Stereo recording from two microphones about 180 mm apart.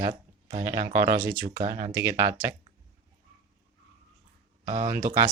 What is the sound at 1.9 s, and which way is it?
Speech, 10° right (ahead or behind).